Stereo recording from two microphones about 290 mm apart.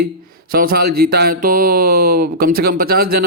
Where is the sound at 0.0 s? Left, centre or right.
Right.